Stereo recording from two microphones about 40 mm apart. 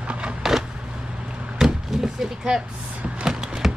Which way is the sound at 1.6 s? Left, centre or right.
Centre.